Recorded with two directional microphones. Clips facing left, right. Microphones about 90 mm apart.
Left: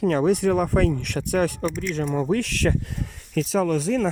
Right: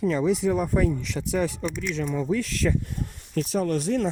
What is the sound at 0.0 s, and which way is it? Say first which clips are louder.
Speech: left 3 dB; 70° left (ahead or behind).